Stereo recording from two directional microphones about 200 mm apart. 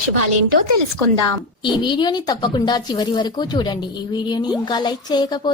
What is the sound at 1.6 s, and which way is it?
A woman's voice, 25° left (ahead or behind).